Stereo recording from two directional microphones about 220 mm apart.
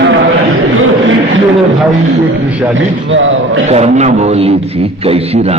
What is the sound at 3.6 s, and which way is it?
A man's voice, 30° right (ahead or behind).